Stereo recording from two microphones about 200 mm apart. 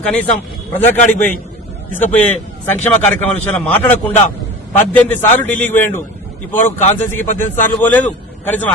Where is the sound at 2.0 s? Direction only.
10° left (ahead or behind).